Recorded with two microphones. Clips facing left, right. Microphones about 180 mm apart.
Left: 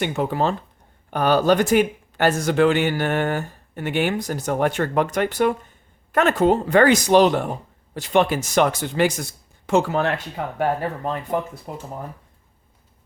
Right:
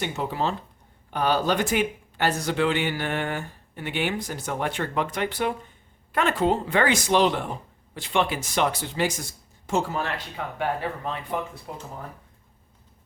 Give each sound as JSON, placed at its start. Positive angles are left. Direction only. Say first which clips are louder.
{"t": 0.0, "sound": "speech", "louder": "left 5 dB", "side_deg": 55}
{"t": 9.6, "sound": "speech", "louder": "left 7 dB", "side_deg": 65}
{"t": 10.3, "sound": "speech", "louder": "left 5 dB", "side_deg": 45}